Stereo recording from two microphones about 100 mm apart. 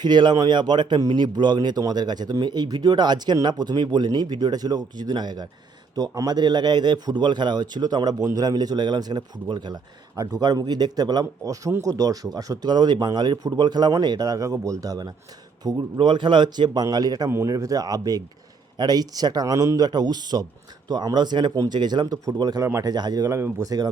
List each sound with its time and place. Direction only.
0.0 s a man's voice: 45° right (ahead or behind)
16.0 s a man's voice: 50° right (ahead or behind)
23.3 s speech: 30° right (ahead or behind)